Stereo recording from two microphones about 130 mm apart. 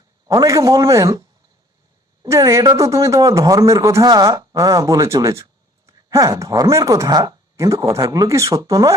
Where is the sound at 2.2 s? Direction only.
25° right (ahead or behind).